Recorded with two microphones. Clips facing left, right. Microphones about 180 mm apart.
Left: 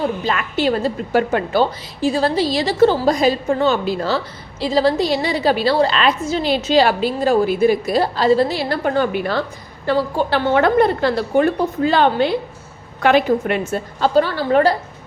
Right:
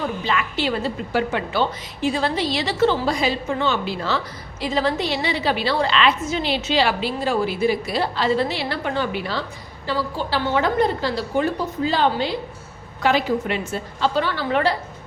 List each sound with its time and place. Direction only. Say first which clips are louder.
0.0 s a woman's voice: left 3 dB; 45° left (ahead or behind)